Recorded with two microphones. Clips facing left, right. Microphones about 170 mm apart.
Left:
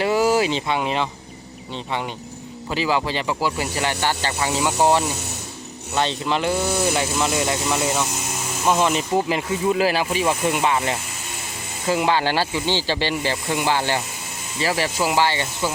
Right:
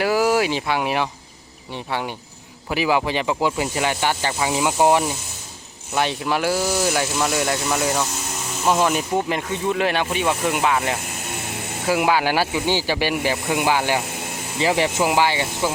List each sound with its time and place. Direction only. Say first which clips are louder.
0.0 s speech: even; centre (ahead or behind)
2.6 s speech: right 2 dB; 15° right (ahead or behind)